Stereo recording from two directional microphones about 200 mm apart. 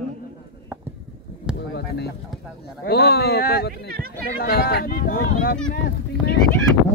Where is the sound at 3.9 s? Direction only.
50° right (ahead or behind).